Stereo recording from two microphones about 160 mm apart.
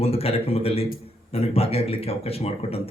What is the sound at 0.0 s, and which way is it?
A man's voice, 40° left (ahead or behind).